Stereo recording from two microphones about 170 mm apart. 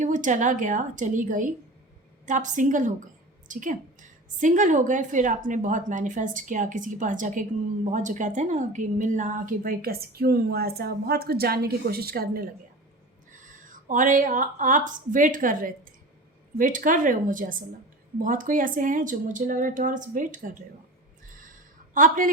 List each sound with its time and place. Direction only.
0.0 s a woman's voice: 50° right (ahead or behind)
13.3 s a woman's voice: 50° right (ahead or behind)
21.9 s a woman's voice: 55° right (ahead or behind)